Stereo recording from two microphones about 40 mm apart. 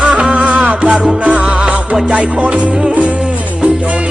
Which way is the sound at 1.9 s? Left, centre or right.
Right.